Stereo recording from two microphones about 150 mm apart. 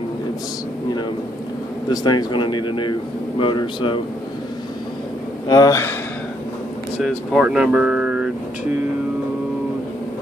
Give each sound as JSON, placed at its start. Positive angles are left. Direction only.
{"t": 1.9, "sound": "a man's voice", "side_deg": 30}
{"t": 5.5, "sound": "speech", "side_deg": 25}
{"t": 7.0, "sound": "speech", "side_deg": -5}